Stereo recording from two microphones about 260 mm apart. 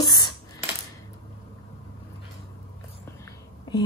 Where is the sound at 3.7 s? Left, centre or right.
Centre.